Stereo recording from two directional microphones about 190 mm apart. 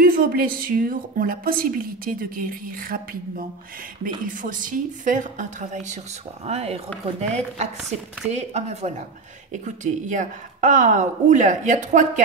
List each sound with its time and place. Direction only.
0.0 s a woman's voice: 50° right (ahead or behind)